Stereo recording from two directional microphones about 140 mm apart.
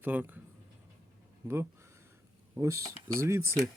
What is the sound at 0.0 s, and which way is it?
Speech, 15° right (ahead or behind).